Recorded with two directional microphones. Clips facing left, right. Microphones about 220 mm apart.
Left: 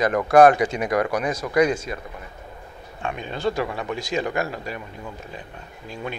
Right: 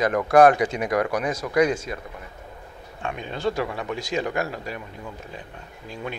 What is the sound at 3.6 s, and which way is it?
Speech, 25° left (ahead or behind).